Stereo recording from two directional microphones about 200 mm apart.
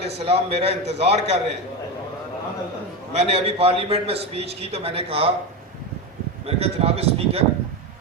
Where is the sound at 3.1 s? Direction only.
30° right (ahead or behind).